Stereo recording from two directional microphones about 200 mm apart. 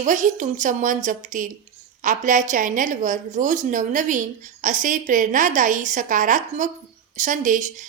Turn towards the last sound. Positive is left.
turn(degrees=-40)  # may be behind; listen again after turning